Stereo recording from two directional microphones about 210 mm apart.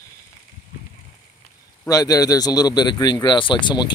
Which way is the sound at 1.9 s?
15° left (ahead or behind).